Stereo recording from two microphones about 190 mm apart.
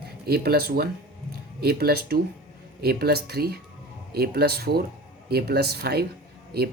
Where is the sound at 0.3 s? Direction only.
55° right (ahead or behind).